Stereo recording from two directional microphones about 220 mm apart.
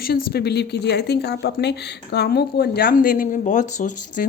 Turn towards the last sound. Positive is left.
turn(degrees=40)  # may be behind; listen again after turning